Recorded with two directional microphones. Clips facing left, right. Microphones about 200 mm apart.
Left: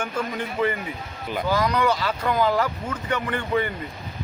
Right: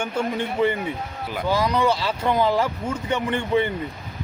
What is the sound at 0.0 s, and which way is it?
Speech, 30° right (ahead or behind).